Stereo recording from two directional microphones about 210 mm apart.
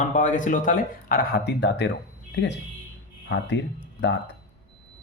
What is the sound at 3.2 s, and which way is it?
Speech, 60° left (ahead or behind).